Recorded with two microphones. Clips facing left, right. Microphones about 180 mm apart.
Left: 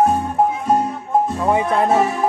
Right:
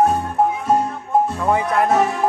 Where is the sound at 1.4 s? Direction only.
25° left (ahead or behind).